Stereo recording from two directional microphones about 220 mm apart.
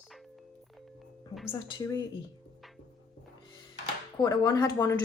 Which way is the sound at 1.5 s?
20° left (ahead or behind).